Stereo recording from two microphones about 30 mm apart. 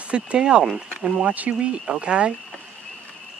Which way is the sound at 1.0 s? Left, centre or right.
Right.